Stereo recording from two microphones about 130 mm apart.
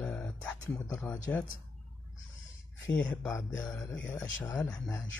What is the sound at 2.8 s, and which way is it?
Speech, 10° left (ahead or behind).